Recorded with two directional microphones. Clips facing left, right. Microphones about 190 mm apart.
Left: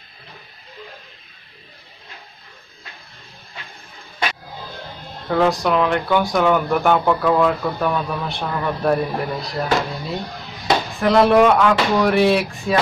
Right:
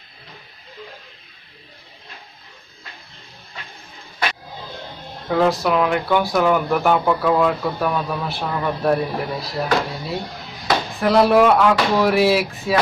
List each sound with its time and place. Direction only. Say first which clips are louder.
5.3 s speech: even; centre (ahead or behind)